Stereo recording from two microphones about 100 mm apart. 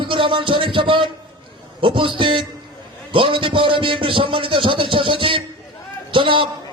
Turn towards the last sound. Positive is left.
turn(degrees=-55)  # may be behind; listen again after turning